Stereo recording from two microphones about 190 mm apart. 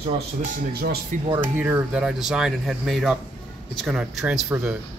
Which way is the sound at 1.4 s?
10° right (ahead or behind).